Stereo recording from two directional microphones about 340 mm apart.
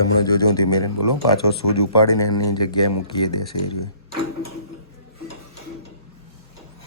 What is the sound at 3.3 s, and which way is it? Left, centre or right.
Speech, left.